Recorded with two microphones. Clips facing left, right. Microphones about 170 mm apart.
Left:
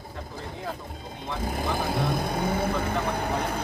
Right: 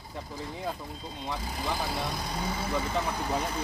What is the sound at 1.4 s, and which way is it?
Speech, 50° left (ahead or behind).